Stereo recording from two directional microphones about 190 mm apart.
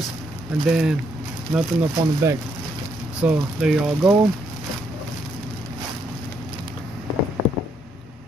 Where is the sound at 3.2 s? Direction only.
5° right (ahead or behind).